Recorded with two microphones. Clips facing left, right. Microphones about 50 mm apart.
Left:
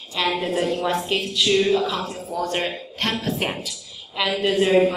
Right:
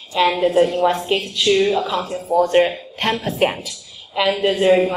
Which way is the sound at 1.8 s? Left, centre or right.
Right.